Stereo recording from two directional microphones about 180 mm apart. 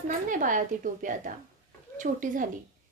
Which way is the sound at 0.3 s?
45° right (ahead or behind).